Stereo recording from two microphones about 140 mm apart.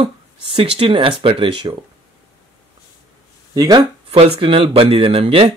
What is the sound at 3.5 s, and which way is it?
Speech, 30° right (ahead or behind).